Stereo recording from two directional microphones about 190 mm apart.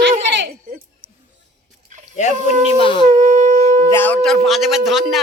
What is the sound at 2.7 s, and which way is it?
Speech, 25° left (ahead or behind).